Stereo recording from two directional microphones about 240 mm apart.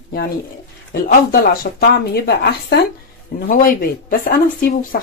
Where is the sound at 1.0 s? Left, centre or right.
Left.